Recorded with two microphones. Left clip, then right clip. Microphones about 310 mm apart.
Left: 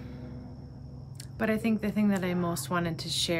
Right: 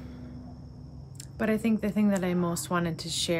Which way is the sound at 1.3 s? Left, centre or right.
Centre.